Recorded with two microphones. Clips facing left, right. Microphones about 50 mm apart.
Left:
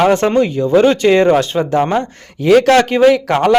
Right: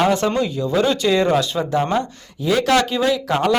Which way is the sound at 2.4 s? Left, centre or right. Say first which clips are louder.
Left 9 dB; left.